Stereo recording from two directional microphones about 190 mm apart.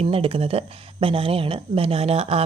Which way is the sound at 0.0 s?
30° right (ahead or behind).